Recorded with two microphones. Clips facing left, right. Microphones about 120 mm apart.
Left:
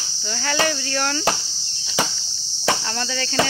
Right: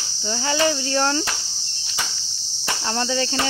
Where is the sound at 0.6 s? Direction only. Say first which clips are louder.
Right 3 dB; 25° right (ahead or behind).